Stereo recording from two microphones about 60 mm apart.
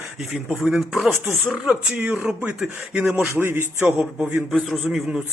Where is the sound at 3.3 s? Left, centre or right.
Right.